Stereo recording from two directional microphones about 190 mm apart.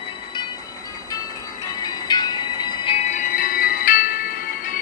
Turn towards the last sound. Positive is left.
turn(degrees=45)  # may be behind; listen again after turning